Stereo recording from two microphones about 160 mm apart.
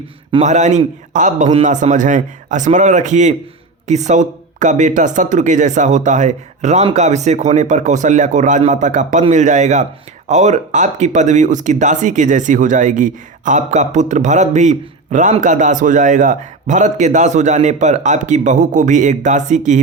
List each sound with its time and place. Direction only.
0.3 s speech: 45° right (ahead or behind)